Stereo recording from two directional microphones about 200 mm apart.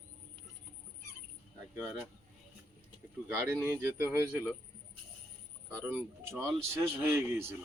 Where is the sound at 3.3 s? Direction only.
10° right (ahead or behind).